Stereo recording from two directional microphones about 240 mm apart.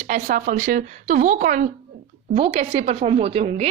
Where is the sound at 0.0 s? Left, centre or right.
Right.